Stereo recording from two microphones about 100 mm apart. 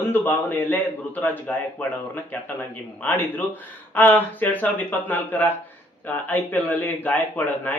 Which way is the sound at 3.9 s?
20° left (ahead or behind).